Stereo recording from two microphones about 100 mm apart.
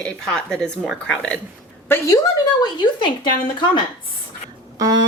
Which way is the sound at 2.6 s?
50° left (ahead or behind).